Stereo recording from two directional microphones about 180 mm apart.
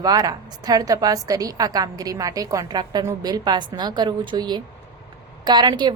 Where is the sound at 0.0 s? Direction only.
20° right (ahead or behind).